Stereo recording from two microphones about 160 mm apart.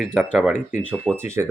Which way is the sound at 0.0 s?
5° right (ahead or behind).